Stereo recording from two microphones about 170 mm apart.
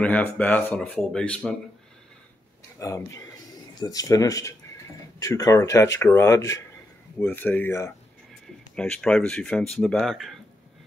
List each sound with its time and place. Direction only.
0.0 s speech: 10° left (ahead or behind)
2.8 s speech: 20° left (ahead or behind); by 10.4 s centre (ahead or behind)